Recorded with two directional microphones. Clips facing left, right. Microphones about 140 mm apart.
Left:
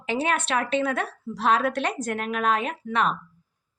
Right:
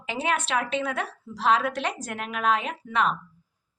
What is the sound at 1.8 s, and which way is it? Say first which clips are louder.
Speech: left 4 dB; 15° right (ahead or behind).